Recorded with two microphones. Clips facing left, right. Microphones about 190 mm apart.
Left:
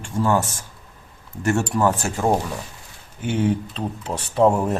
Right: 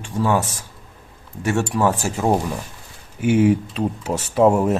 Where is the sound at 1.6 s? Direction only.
5° right (ahead or behind).